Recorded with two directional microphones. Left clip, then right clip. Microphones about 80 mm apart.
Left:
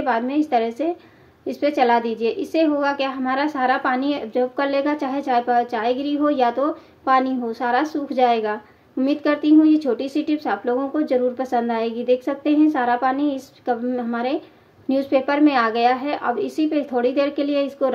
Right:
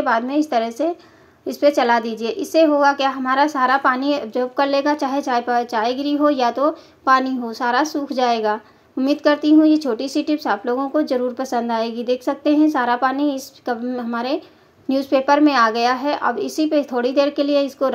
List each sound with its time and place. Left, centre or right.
0.0 s a woman's voice: centre